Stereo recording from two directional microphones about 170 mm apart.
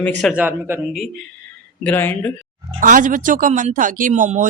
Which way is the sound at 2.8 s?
50° right (ahead or behind).